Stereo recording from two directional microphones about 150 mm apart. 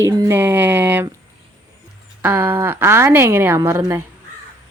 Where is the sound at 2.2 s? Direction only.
10° right (ahead or behind).